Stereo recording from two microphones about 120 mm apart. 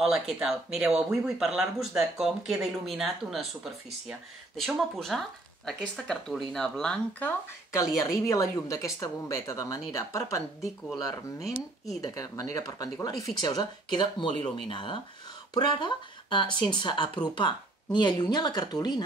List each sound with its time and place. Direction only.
0.0 s speech: centre (ahead or behind)
7.7 s a woman's voice: 25° left (ahead or behind)
11.4 s speech: centre (ahead or behind)
12.0 s a woman's voice: 30° left (ahead or behind)